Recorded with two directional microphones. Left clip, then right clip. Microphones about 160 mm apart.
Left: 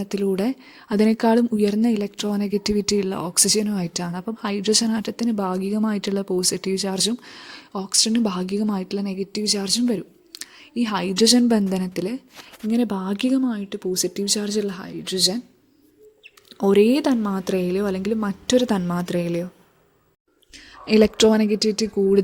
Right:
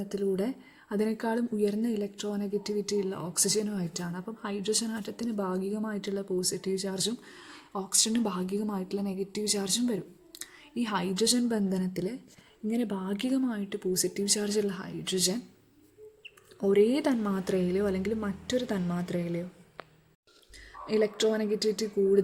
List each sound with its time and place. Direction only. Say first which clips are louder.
0.0 s speech: left 7 dB; 45° left (ahead or behind); by 15.4 s 25° left (ahead or behind)
16.6 s speech: left 7 dB; 45° left (ahead or behind)
20.8 s speech: left 10 dB; 55° left (ahead or behind)